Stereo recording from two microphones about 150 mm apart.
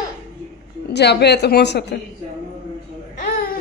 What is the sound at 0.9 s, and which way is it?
Speech, 90° left.